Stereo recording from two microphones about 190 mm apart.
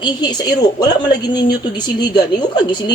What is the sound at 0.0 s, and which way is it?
Speech, 20° left (ahead or behind).